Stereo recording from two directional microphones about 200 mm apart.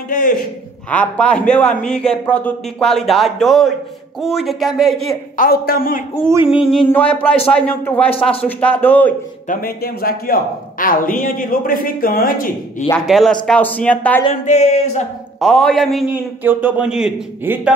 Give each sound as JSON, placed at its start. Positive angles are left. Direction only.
{"t": 0.1, "sound": "a sound", "side_deg": 40}
{"t": 0.8, "sound": "a man's voice", "side_deg": 5}
{"t": 5.4, "sound": "a man's voice", "side_deg": 50}
{"t": 6.2, "sound": "a man's voice", "side_deg": -10}
{"t": 6.9, "sound": "speech", "side_deg": 10}
{"t": 8.1, "sound": "speech", "side_deg": 30}
{"t": 8.5, "sound": "speech", "side_deg": 5}
{"t": 9.5, "sound": "a man's voice", "side_deg": 45}
{"t": 12.9, "sound": "speech", "side_deg": 0}
{"t": 14.2, "sound": "a sound", "side_deg": 35}
{"t": 15.4, "sound": "a man's voice", "side_deg": 0}